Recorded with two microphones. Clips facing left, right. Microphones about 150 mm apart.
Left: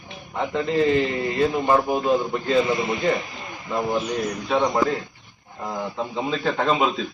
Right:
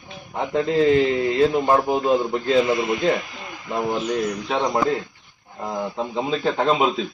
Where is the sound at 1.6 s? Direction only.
25° right (ahead or behind).